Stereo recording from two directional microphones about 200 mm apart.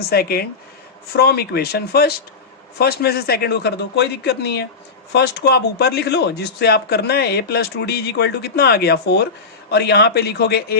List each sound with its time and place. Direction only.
0.1 s speech: 50° left (ahead or behind)